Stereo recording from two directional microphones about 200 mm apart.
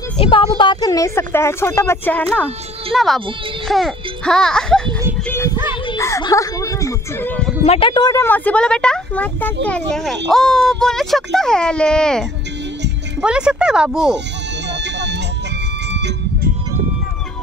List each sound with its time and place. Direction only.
0.2 s speech: 25° left (ahead or behind); by 4.8 s 5° left (ahead or behind)
5.3 s music: 15° left (ahead or behind)
7.6 s speech: 30° left (ahead or behind); by 14.1 s 5° right (ahead or behind)
14.7 s vehicle: 60° right (ahead or behind)